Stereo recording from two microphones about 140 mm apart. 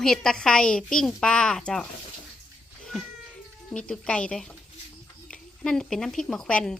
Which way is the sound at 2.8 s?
Centre (ahead or behind).